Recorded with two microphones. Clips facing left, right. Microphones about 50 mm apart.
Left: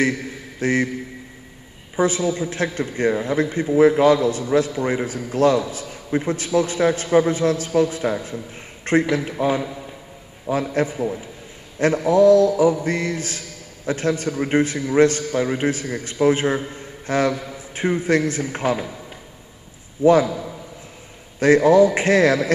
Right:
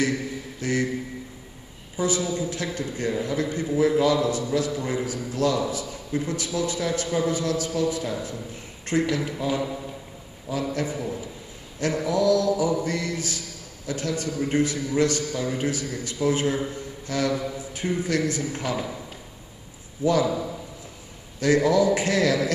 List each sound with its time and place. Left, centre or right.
0.6 s a sound: left
2.0 s a man's voice: left
20.0 s a man's voice: left
21.4 s a man's voice: left